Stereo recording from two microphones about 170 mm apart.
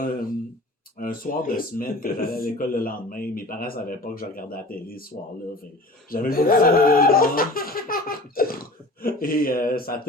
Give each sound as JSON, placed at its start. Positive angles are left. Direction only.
{"t": 0.0, "sound": "a sound", "side_deg": 55}
{"t": 0.9, "sound": "speech", "side_deg": 55}
{"t": 6.1, "sound": "speech", "side_deg": 60}